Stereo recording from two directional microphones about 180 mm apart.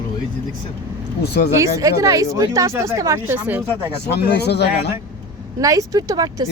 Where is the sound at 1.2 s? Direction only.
65° left (ahead or behind).